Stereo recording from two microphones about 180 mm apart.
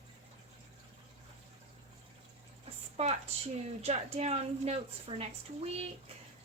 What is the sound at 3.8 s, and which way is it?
Speech, 35° right (ahead or behind).